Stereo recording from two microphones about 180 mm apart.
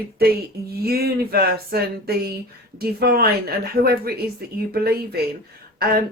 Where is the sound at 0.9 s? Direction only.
60° right (ahead or behind).